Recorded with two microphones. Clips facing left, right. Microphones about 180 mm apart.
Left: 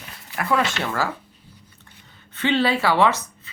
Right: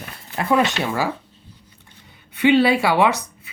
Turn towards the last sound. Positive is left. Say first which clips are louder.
# right 1 dB
turn(degrees=-15)  # may be behind; listen again after turning